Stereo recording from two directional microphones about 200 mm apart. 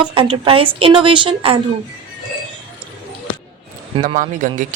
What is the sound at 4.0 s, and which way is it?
Speech, 40° right (ahead or behind).